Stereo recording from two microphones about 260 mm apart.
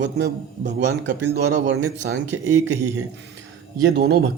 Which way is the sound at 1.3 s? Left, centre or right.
Right.